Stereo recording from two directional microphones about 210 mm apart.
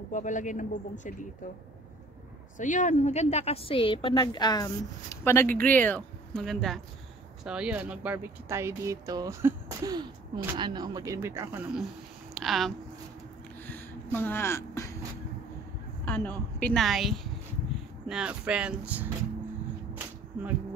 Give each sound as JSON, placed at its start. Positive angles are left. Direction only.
{"t": 0.1, "sound": "speech", "side_deg": 35}
{"t": 2.5, "sound": "a woman's voice", "side_deg": 35}
{"t": 13.6, "sound": "a sound", "side_deg": 10}
{"t": 14.1, "sound": "speech", "side_deg": 10}
{"t": 16.1, "sound": "a woman's voice", "side_deg": 10}
{"t": 19.9, "sound": "whip", "side_deg": -10}